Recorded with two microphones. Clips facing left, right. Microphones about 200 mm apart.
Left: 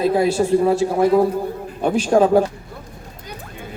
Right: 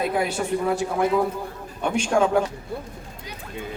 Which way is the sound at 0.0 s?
30° left (ahead or behind).